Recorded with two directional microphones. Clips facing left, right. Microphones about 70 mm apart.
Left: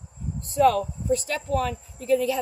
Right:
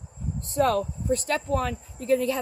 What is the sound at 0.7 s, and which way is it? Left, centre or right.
Speech, right.